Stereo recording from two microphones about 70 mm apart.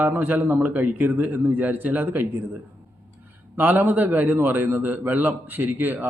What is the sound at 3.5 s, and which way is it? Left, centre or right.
A man's voice, right.